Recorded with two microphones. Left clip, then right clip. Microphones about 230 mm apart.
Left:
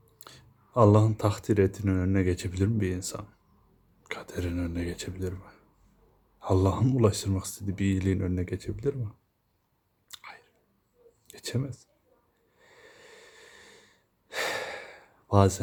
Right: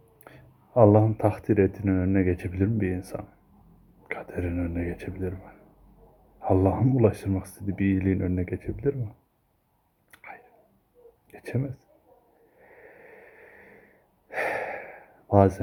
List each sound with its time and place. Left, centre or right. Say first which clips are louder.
0.2 s a sound: even; centre
1.1 s speech: right 3 dB; centre
10.1 s whispering: right 1 dB; centre
11.3 s speech: right 2 dB; centre
12.5 s breathing: right 3 dB; centre